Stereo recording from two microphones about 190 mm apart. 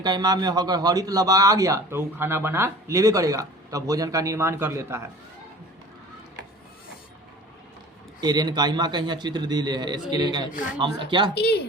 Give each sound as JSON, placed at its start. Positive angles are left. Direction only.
{"t": 0.0, "sound": "a man's voice", "side_deg": -20}
{"t": 8.2, "sound": "a man's voice", "side_deg": -20}
{"t": 11.3, "sound": "speech", "side_deg": 60}